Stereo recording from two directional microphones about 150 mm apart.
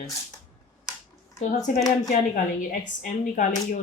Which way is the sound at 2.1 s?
60° left (ahead or behind).